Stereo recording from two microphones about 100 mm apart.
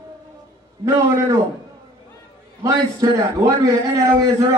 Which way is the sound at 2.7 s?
35° right (ahead or behind).